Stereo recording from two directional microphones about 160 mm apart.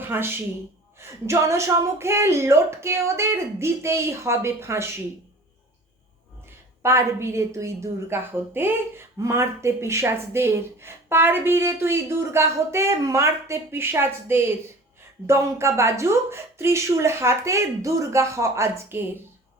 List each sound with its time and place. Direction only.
0.0 s a woman's voice: 15° right (ahead or behind)
6.8 s a woman's voice: 15° right (ahead or behind)